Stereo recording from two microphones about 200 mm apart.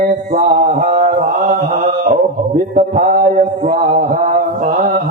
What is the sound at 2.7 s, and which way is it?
Mantra, 40° right (ahead or behind).